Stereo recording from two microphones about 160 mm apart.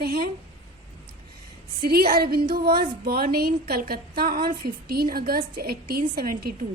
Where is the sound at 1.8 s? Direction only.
70° right (ahead or behind).